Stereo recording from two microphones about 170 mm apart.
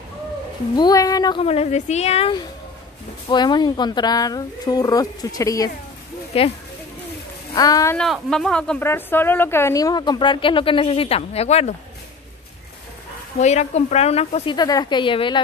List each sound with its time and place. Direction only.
0.7 s speech: 20° left (ahead or behind)
1.4 s a woman's voice: 35° left (ahead or behind); by 5.7 s 20° left (ahead or behind)
6.3 s a woman's voice: 35° left (ahead or behind)
7.5 s speech: 20° left (ahead or behind)
8.0 s speech: 5° left (ahead or behind); by 11.7 s 40° left (ahead or behind)
13.4 s a woman's voice: 40° left (ahead or behind)